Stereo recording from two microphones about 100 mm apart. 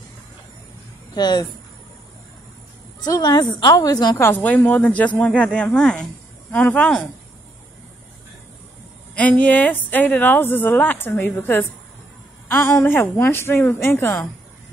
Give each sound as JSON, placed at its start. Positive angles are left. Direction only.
{"t": 1.1, "sound": "speech", "side_deg": 45}
{"t": 3.0, "sound": "a woman's voice", "side_deg": 40}
{"t": 4.2, "sound": "speech", "side_deg": 15}
{"t": 9.1, "sound": "a woman's voice", "side_deg": 15}